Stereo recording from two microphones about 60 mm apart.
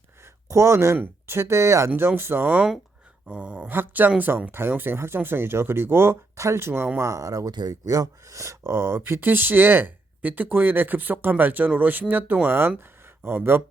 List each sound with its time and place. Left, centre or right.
0.4 s speech: right
2.0 s speech: right
3.2 s a sound: right
3.7 s speech: right
7.0 s speech: right